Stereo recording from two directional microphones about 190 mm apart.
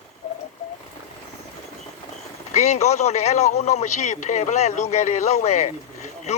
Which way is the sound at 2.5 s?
35° left (ahead or behind).